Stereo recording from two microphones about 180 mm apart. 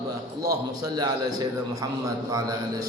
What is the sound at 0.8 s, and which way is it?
A man's voice, 20° right (ahead or behind).